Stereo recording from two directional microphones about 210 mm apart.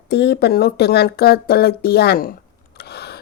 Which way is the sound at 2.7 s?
50° left (ahead or behind).